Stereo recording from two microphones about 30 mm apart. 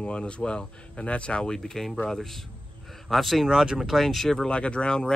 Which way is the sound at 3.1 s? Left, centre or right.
Centre.